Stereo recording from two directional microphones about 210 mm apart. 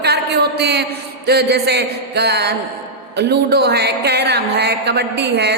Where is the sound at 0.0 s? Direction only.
50° right (ahead or behind).